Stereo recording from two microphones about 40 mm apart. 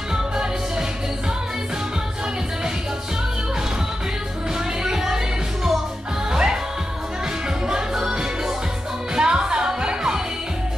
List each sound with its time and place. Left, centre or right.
0.1 s music: centre
4.8 s music: centre
7.6 s music: centre